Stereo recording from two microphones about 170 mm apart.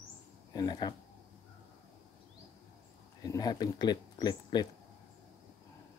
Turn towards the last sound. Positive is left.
turn(degrees=25)  # may be behind; listen again after turning